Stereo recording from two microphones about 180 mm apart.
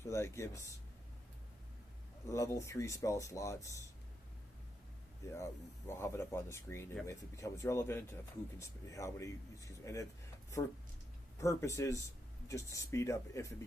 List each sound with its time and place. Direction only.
0.0 s speech: 15° left (ahead or behind)
2.3 s speech: 15° left (ahead or behind)
5.2 s speech: 15° left (ahead or behind)
11.3 s speech: 15° left (ahead or behind)